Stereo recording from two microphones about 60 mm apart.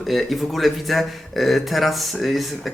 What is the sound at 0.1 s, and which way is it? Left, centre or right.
Speech, centre.